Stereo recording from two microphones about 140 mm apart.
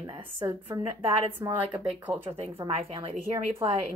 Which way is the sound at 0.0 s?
35° right (ahead or behind).